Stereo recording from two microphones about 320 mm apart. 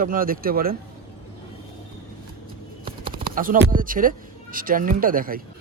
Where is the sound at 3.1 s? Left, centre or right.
Right.